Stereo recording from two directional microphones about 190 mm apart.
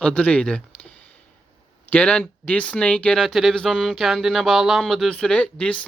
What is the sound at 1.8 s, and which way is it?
Speech, 10° left (ahead or behind).